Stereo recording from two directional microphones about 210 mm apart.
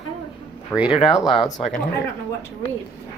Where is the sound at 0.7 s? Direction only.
5° right (ahead or behind).